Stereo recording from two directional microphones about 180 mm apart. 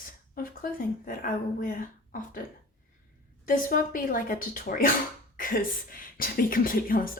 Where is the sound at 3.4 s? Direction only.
50° left (ahead or behind).